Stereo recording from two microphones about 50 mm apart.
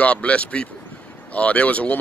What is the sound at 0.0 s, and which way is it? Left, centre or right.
Speech, left.